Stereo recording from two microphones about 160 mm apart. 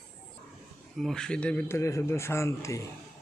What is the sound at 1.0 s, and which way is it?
Speech, 5° left (ahead or behind).